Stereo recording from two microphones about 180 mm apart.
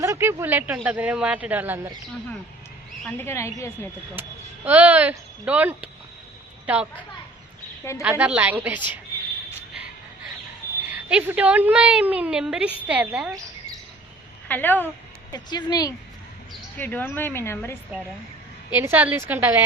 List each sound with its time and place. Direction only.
0.0 s speech: 15° right (ahead or behind)
3.0 s a woman's voice: 10° left (ahead or behind)
4.1 s speech: 10° right (ahead or behind)
8.0 s speech: 10° right (ahead or behind)
10.9 s speech: 10° right (ahead or behind)
14.4 s speech: 10° left (ahead or behind)
15.3 s speech: 20° left (ahead or behind)
16.7 s a woman's voice: 10° left (ahead or behind)
18.7 s speech: 10° right (ahead or behind)